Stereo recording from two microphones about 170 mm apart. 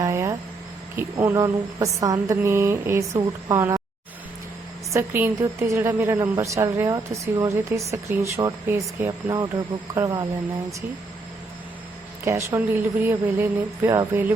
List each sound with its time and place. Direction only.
0.0 s a sound: 20° right (ahead or behind)
0.9 s a woman's voice: 15° right (ahead or behind)
4.9 s a woman's voice: 15° right (ahead or behind)
12.2 s a woman's voice: 15° right (ahead or behind)